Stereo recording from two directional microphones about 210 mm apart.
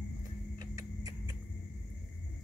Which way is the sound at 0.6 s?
20° right (ahead or behind).